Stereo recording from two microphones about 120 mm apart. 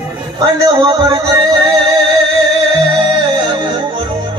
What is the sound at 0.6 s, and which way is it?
Music, 40° right (ahead or behind).